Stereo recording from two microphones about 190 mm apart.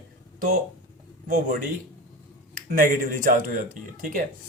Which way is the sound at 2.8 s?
45° right (ahead or behind).